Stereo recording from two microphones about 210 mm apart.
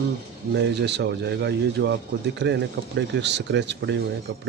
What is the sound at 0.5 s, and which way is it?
Speech, 55° right (ahead or behind).